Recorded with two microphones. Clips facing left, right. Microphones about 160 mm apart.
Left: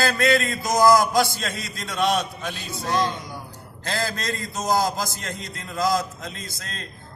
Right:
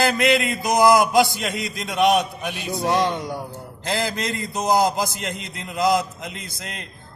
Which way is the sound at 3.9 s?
15° right (ahead or behind).